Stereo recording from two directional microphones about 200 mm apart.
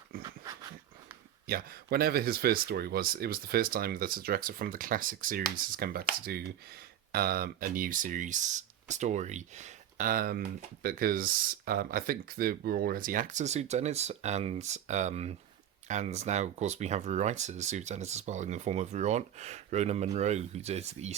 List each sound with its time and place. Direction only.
0.2 s dog: 15° right (ahead or behind)
1.5 s speech: 50° right (ahead or behind)
7.1 s speech: 50° right (ahead or behind); by 21.2 s 35° right (ahead or behind)